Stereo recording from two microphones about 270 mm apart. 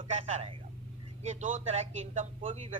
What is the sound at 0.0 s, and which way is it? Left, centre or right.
A man's voice, right.